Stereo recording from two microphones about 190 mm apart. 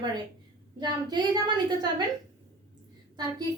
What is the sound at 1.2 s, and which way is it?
Speech, 20° right (ahead or behind).